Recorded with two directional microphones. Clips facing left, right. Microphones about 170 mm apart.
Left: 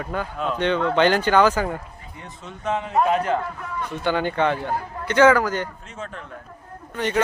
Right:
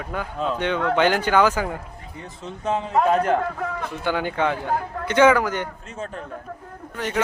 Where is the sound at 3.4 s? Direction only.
90° right.